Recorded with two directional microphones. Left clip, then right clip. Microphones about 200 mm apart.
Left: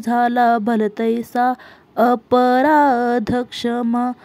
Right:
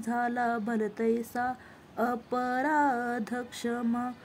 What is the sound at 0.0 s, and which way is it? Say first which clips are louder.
Speech: left 14 dB; 40° left (ahead or behind).